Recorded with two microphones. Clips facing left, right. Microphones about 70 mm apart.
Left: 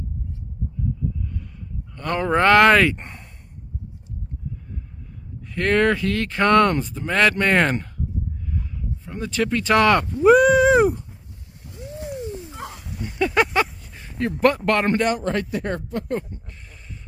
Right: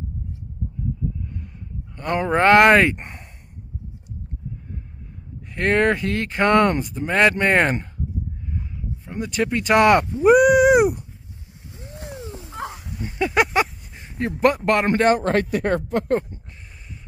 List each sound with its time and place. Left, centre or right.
2.0 s speech: centre
5.5 s speech: right
8.5 s a sound: centre
12.7 s a sound: centre
14.4 s speech: centre
15.1 s speech: right